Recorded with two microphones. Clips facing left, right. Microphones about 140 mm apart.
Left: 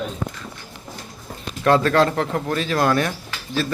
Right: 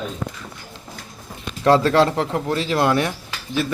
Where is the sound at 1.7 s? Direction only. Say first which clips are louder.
Right 1 dB; 30° right (ahead or behind).